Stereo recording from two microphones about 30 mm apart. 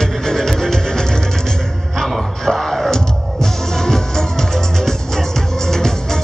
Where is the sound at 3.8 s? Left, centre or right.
Centre.